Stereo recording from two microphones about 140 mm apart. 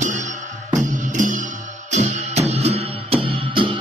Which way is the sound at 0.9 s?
65° right (ahead or behind).